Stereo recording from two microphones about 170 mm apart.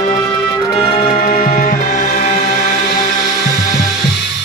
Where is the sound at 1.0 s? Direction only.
60° left (ahead or behind); by 2.5 s 40° left (ahead or behind).